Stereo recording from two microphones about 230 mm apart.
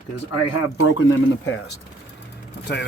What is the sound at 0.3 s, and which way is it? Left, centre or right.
Speech, left.